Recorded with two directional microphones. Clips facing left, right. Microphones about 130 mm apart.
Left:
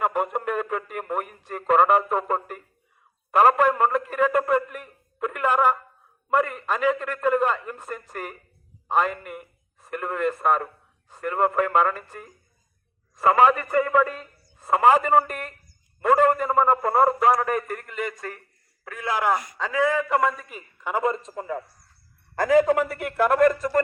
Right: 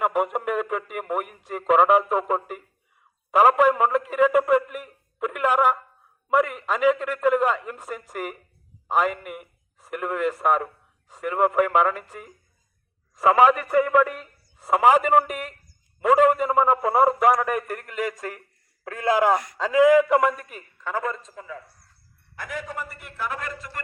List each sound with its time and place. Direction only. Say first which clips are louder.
0.0 s speech: right 1 dB; 10° right (ahead or behind)
3.3 s a sound: right 1 dB; 10° right (ahead or behind)
6.3 s a man's voice: right 1 dB; 10° right (ahead or behind)
20.8 s a man's voice: left 3 dB; 15° left (ahead or behind)
21.1 s a man's voice: left 6 dB; 45° left (ahead or behind)
22.4 s a man's voice: left 15 dB; 90° left; by 23.8 s 45° left (ahead or behind)